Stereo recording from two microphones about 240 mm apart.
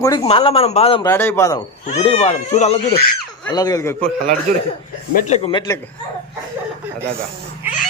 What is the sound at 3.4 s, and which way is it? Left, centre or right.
Speech, centre.